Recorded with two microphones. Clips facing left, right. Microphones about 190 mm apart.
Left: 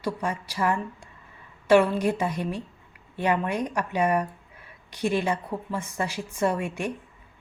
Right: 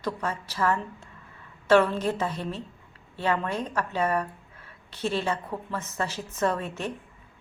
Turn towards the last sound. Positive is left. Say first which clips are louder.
# left 2 dB
turn(degrees=15)  # may be behind; listen again after turning